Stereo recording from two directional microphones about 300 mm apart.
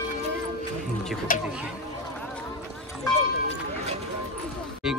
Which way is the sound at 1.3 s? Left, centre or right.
Left.